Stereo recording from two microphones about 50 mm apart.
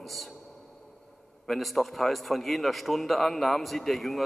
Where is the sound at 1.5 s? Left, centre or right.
Centre.